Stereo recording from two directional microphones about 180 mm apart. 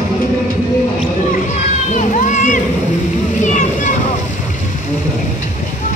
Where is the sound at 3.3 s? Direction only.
45° left (ahead or behind).